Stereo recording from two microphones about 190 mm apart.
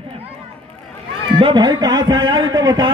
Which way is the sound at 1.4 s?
20° right (ahead or behind).